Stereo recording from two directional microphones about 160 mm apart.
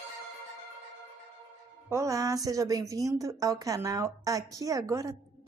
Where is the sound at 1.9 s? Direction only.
20° right (ahead or behind).